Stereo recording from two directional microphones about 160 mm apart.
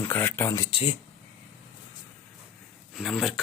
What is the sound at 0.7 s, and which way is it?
Speech, 40° left (ahead or behind).